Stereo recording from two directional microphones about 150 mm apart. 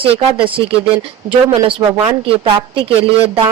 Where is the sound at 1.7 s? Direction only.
35° right (ahead or behind).